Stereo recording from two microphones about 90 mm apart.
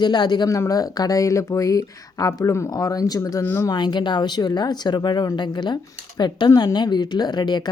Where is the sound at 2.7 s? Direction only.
45° left (ahead or behind).